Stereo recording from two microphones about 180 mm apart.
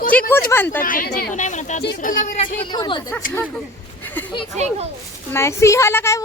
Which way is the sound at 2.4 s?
25° left (ahead or behind).